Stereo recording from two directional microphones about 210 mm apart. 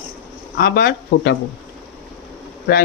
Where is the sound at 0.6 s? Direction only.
45° left (ahead or behind).